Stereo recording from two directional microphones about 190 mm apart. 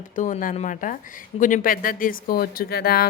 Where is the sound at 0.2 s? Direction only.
45° left (ahead or behind).